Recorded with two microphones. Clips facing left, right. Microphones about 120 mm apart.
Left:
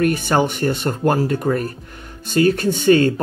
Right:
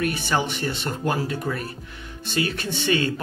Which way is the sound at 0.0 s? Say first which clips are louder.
Left 7 dB; 50° left (ahead or behind).